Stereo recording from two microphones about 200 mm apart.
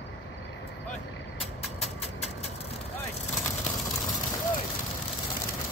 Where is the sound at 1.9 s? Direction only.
30° left (ahead or behind).